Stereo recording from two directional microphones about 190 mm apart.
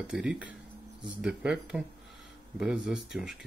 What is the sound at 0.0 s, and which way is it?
Speech, 5° right (ahead or behind).